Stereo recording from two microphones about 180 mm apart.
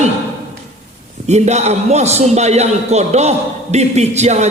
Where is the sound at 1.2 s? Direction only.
40° right (ahead or behind).